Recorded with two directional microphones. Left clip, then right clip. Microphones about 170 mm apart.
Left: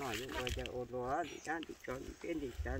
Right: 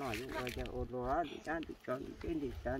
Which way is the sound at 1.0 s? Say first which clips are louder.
Right 3 dB; 50° right (ahead or behind).